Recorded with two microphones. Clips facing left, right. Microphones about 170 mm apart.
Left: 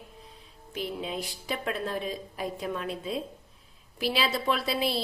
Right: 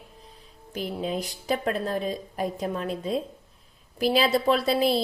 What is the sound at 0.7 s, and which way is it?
A woman's voice, 45° right (ahead or behind).